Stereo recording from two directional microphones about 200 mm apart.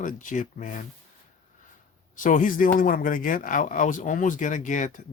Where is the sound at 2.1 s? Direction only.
40° left (ahead or behind).